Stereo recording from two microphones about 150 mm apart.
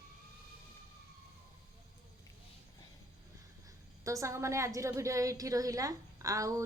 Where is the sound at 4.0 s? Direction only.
20° right (ahead or behind).